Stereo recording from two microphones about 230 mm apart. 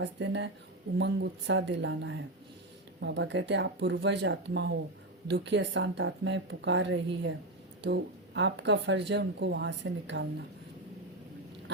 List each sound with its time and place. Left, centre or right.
0.0 s speech: right